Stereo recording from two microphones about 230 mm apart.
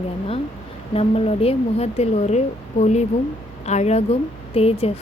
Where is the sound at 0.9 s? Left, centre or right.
Left.